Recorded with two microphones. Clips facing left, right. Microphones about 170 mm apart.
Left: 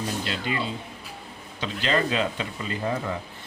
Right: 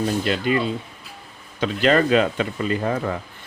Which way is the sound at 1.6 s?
55° right (ahead or behind).